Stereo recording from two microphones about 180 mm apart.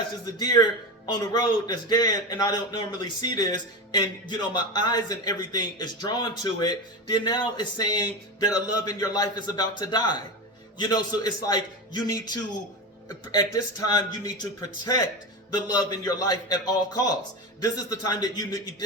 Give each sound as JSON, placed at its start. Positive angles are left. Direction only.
{"t": 0.3, "sound": "a man's voice", "side_deg": 20}